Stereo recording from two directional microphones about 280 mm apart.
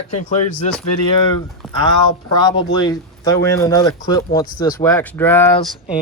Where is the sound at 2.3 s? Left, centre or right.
Centre.